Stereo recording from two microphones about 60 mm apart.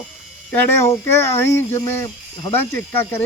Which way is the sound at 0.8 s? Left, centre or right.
Left.